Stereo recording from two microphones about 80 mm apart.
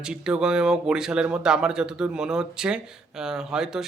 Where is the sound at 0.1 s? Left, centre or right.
Centre.